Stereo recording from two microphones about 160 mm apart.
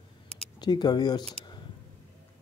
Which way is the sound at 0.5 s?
25° left (ahead or behind).